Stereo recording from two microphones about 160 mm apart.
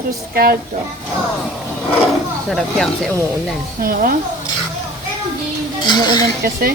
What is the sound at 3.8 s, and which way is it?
Speech, 60° right (ahead or behind).